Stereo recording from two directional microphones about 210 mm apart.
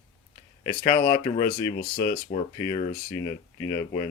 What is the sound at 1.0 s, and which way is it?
Speech, 25° left (ahead or behind).